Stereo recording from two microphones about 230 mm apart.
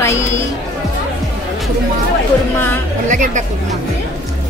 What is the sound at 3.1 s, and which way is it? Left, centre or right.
Speech, right.